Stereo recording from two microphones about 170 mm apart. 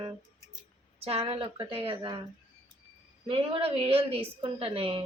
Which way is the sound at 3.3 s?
35° right (ahead or behind).